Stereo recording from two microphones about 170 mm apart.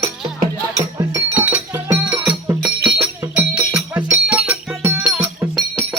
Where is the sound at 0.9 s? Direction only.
20° right (ahead or behind).